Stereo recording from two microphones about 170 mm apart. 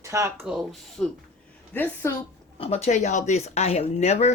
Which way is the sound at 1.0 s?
5° left (ahead or behind).